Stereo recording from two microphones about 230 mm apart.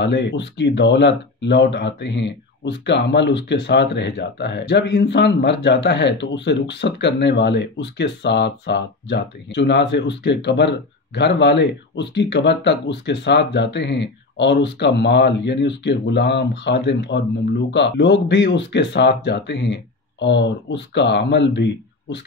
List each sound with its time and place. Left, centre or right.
0.0 s speech: left